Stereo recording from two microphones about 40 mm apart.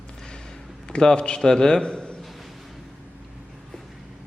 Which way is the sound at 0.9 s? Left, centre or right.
Left.